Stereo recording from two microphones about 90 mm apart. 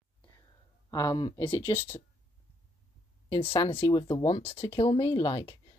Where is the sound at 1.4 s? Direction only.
85° left.